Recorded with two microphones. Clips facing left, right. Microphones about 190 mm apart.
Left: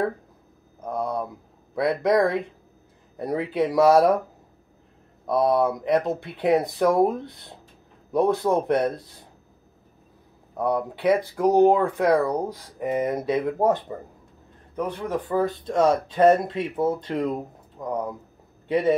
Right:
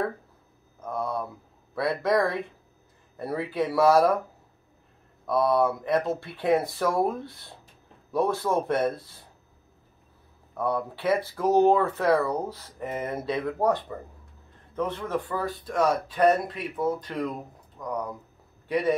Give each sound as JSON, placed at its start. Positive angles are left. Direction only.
{"t": 0.7, "sound": "speech", "side_deg": 15}
{"t": 5.2, "sound": "speech", "side_deg": 20}
{"t": 10.6, "sound": "speech", "side_deg": 15}